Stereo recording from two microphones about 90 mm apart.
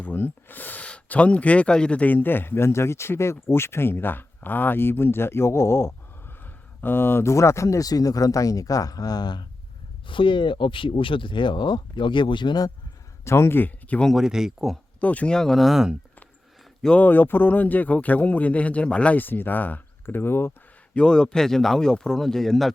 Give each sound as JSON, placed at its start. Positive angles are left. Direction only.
{"t": 0.0, "sound": "speech", "side_deg": 20}
{"t": 10.1, "sound": "speech", "side_deg": 65}
{"t": 13.2, "sound": "speech", "side_deg": 30}
{"t": 14.1, "sound": "speech", "side_deg": -5}
{"t": 15.0, "sound": "speech", "side_deg": 15}
{"t": 16.8, "sound": "speech", "side_deg": 15}
{"t": 20.9, "sound": "speech", "side_deg": 10}